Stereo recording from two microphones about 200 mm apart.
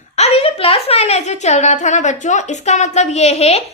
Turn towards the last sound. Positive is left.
turn(degrees=30)  # may be behind; listen again after turning